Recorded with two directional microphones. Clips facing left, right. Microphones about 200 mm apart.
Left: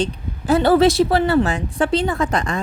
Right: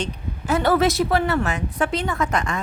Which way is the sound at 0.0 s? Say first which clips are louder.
Left 5 dB; 35° left (ahead or behind).